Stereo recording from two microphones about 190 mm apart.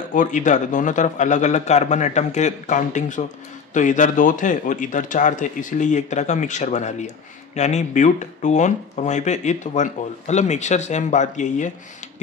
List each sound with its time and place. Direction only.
0.1 s speech: 40° left (ahead or behind)